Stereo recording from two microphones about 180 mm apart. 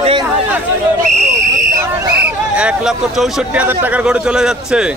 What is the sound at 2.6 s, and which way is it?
Speech, 5° right (ahead or behind).